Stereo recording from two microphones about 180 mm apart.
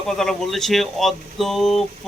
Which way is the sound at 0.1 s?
Centre (ahead or behind).